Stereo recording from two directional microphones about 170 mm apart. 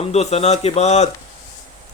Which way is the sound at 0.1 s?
40° left (ahead or behind).